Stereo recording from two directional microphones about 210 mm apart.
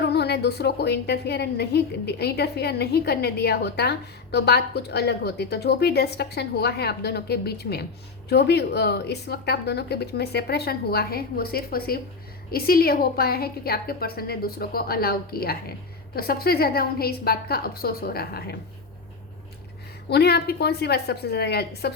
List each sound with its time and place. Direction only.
0.0 s a woman's voice: 50° left (ahead or behind)
20.1 s a woman's voice: 50° left (ahead or behind)